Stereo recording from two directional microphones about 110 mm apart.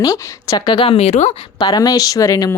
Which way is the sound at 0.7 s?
60° left (ahead or behind).